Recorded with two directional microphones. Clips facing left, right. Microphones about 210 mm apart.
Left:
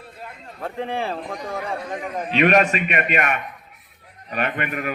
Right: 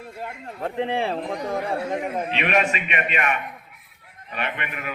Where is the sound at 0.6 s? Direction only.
20° right (ahead or behind).